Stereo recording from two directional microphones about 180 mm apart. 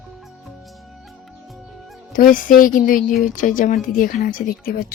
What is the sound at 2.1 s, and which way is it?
Speech, 50° left (ahead or behind).